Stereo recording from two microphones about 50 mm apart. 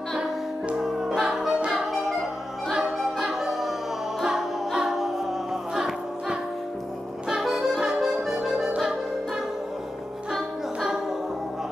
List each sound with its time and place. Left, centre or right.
0.7 s music: centre
7.2 s music: centre
10.3 s music: centre